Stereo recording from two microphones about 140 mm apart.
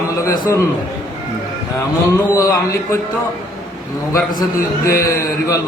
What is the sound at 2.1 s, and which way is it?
Mantra, 25° left (ahead or behind).